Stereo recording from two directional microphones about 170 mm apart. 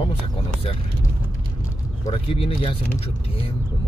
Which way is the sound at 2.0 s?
35° left (ahead or behind).